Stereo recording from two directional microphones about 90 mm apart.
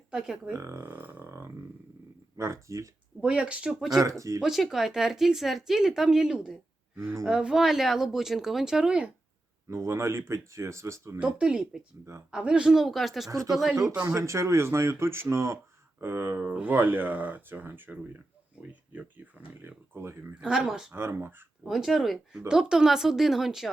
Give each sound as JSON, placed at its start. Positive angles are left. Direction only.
{"t": 0.1, "sound": "speech", "side_deg": -5}
{"t": 0.6, "sound": "speech", "side_deg": -30}
{"t": 0.9, "sound": "a sound", "side_deg": -20}
{"t": 2.4, "sound": "speech", "side_deg": -35}
{"t": 3.2, "sound": "speech", "side_deg": -10}
{"t": 9.6, "sound": "speech", "side_deg": -30}
{"t": 11.2, "sound": "speech", "side_deg": -10}
{"t": 14.1, "sound": "speech", "side_deg": -35}
{"t": 19.6, "sound": "speech", "side_deg": -25}
{"t": 20.4, "sound": "speech", "side_deg": -5}
{"t": 20.9, "sound": "speech", "side_deg": -25}
{"t": 21.6, "sound": "speech", "side_deg": -5}